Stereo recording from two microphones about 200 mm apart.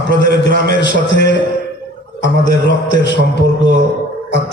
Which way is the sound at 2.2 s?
65° left (ahead or behind).